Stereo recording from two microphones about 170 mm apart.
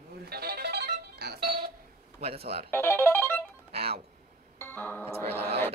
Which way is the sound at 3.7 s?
70° right (ahead or behind).